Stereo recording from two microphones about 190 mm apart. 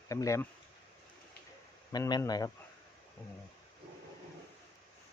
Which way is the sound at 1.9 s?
20° left (ahead or behind).